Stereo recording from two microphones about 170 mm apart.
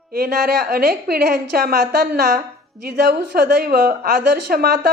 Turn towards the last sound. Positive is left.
turn(degrees=-65)  # may be behind; listen again after turning